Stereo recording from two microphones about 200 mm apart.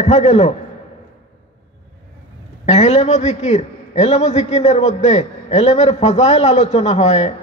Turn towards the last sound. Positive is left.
turn(degrees=35)  # may be behind; listen again after turning